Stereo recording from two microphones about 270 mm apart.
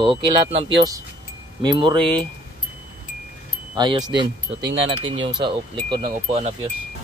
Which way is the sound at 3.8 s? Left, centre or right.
Centre.